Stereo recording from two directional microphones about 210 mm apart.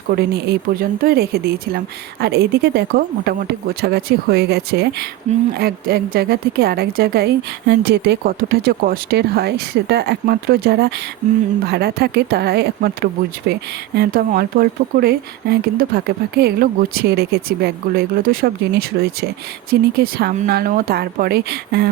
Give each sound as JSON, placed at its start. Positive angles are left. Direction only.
{"t": 0.1, "sound": "speech", "side_deg": -50}